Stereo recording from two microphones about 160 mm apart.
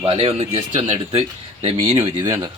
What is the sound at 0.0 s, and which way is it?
Speech, 35° right (ahead or behind).